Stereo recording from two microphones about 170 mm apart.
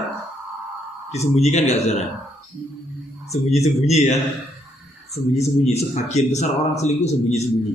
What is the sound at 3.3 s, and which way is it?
A man's voice, 40° left (ahead or behind).